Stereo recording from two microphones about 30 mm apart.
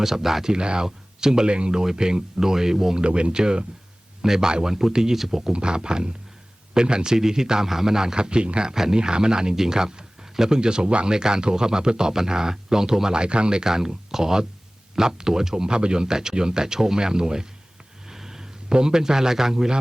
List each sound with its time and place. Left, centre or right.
0.0 s speech: centre
0.5 s speech: right
1.5 s speech: right
1.7 s speech: centre
3.0 s speech: right
5.1 s speech: centre
5.4 s speech: right
8.7 s speech: centre
9.0 s speech: right
13.2 s speech: right
13.7 s speech: centre
18.1 s a sound: centre
18.7 s speech: right